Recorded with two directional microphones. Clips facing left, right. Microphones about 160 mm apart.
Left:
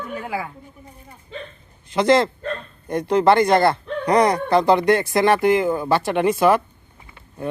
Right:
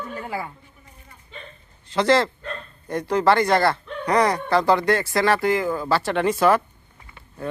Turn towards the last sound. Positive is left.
turn(degrees=15)  # may be behind; listen again after turning